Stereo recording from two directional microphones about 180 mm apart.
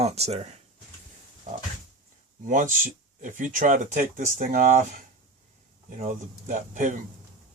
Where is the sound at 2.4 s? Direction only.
45° right (ahead or behind).